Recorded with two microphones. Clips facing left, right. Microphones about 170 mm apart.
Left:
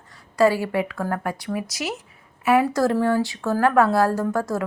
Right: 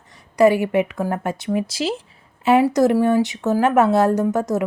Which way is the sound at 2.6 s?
15° right (ahead or behind).